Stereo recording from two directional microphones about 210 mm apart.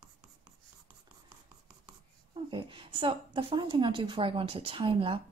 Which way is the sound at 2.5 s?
25° right (ahead or behind).